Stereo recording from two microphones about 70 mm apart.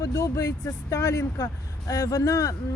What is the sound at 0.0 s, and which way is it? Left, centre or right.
Speech, left.